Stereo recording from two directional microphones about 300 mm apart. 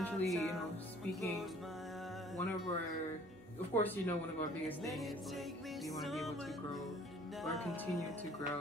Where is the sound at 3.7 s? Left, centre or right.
Centre.